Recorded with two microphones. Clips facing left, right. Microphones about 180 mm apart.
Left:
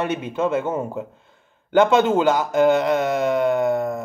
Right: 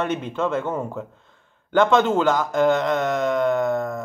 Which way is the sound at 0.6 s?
20° left (ahead or behind).